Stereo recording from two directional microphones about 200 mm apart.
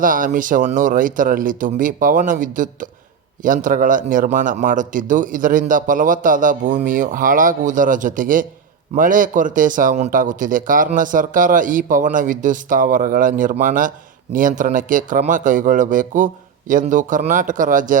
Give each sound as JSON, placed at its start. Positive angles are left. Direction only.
{"t": 0.0, "sound": "a man's voice", "side_deg": -40}